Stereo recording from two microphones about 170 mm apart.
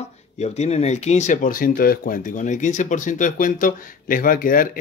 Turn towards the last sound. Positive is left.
turn(degrees=55)  # may be behind; listen again after turning